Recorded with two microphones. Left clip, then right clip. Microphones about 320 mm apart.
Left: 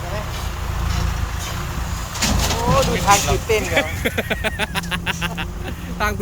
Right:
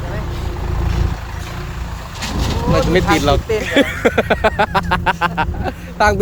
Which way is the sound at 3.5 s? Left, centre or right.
Left.